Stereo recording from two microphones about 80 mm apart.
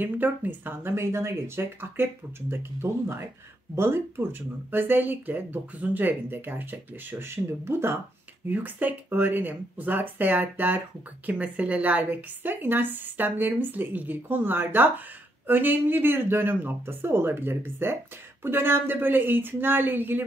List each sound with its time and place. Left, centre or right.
0.0 s speech: right